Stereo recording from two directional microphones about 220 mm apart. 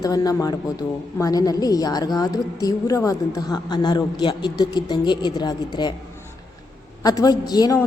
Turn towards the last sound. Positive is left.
turn(degrees=15)  # may be behind; listen again after turning